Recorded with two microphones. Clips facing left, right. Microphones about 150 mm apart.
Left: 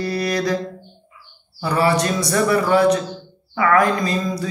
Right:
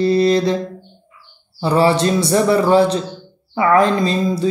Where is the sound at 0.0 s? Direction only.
25° right (ahead or behind).